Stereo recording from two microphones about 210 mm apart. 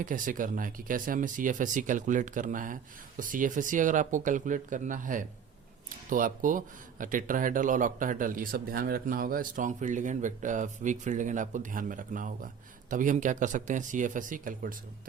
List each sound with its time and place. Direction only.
0.0 s a man's voice: 40° right (ahead or behind)